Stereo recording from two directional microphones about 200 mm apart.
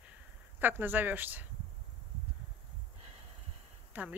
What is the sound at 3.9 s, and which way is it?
Speech, 10° right (ahead or behind).